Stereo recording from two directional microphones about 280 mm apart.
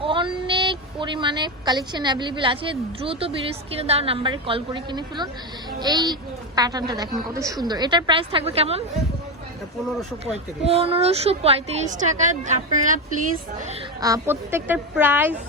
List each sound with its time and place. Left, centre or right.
0.0 s a woman's voice: centre
10.6 s a woman's voice: right
14.0 s a woman's voice: centre